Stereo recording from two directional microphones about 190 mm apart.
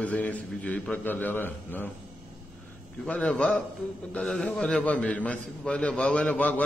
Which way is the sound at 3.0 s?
5° left (ahead or behind).